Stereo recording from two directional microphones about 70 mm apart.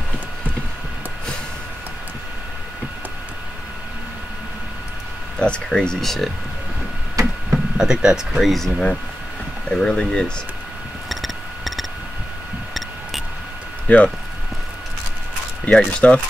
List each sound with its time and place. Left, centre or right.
5.4 s speech: centre
7.2 s a sound: right
7.7 s speech: centre
11.1 s a sound: centre
13.8 s speech: left
15.6 s speech: centre